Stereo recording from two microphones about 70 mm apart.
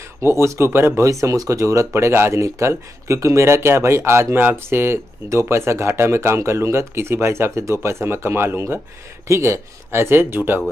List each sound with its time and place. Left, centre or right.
0.2 s speech: right
1.0 s speech: right
2.0 s speech: right
5.3 s speech: right